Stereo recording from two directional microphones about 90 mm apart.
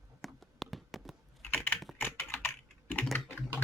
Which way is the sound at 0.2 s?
Centre (ahead or behind).